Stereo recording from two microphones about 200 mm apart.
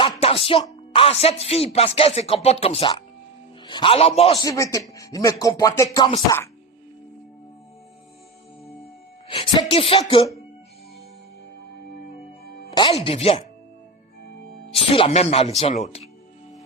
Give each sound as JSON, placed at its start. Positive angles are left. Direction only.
{"t": 0.0, "sound": "speech", "side_deg": 30}
{"t": 4.4, "sound": "music", "side_deg": 15}
{"t": 9.3, "sound": "speech", "side_deg": 25}
{"t": 12.7, "sound": "speech", "side_deg": 25}
{"t": 14.8, "sound": "speech", "side_deg": 30}